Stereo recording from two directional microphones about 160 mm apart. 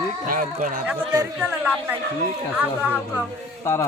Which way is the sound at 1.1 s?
20° right (ahead or behind).